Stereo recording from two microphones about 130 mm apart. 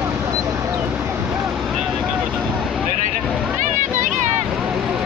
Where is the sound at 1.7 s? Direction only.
5° right (ahead or behind).